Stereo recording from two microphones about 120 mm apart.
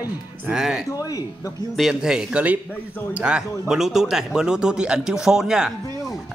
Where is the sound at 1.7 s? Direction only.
Centre (ahead or behind).